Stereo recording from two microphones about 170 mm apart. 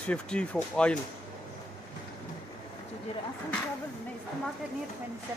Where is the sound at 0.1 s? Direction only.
5° left (ahead or behind).